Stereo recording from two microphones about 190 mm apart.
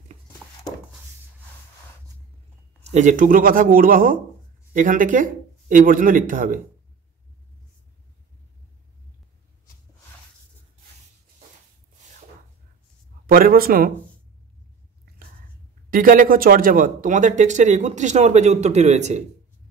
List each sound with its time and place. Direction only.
2.9 s speech: 40° right (ahead or behind)
13.3 s speech: 50° right (ahead or behind)
15.9 s speech: 45° right (ahead or behind)